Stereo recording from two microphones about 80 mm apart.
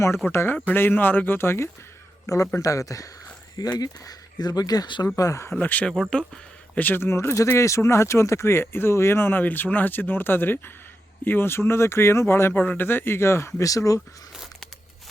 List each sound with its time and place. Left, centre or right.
0.3 s speech: left
2.2 s a man's voice: left
5.0 s speech: left
5.5 s speech: centre; by 14.0 s left
14.3 s a sound: centre